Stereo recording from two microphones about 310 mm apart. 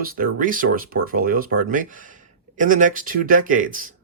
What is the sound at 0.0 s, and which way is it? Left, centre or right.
Speech, right.